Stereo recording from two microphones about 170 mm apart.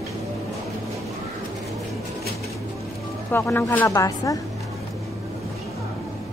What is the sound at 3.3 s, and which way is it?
Speech, 15° left (ahead or behind).